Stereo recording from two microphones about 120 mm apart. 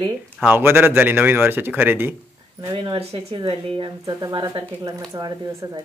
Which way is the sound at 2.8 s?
50° right (ahead or behind).